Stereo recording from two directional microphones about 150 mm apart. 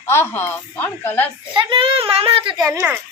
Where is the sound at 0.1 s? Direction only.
15° left (ahead or behind).